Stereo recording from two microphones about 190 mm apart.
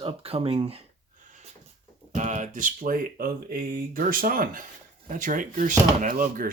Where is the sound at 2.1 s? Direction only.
40° right (ahead or behind).